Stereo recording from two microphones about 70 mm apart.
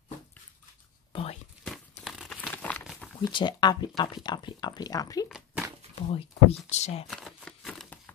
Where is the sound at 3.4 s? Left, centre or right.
Left.